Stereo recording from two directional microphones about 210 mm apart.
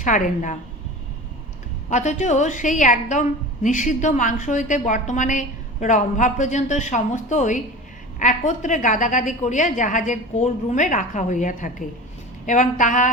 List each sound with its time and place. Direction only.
0.0 s a woman's voice: 35° left (ahead or behind)
1.9 s a woman's voice: 35° left (ahead or behind)